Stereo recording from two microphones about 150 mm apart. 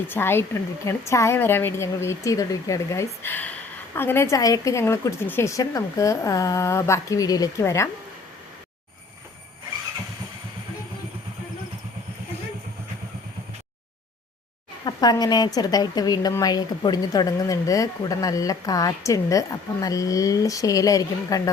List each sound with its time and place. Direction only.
0.1 s a woman's voice: 15° left (ahead or behind)
14.8 s speech: 25° left (ahead or behind)